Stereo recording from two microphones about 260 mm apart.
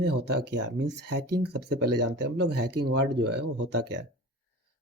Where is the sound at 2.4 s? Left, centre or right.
Right.